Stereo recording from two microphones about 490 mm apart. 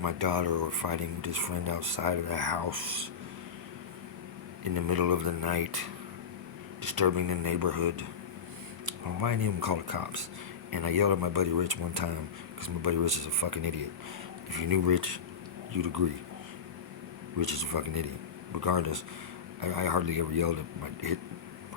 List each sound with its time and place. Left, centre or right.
0.0 s speech: right
4.6 s speech: right
17.4 s speech: right